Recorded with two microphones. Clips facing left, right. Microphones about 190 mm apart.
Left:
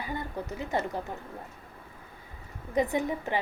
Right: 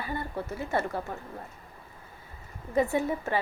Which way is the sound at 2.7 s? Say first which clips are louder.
Right 1 dB; 15° left (ahead or behind).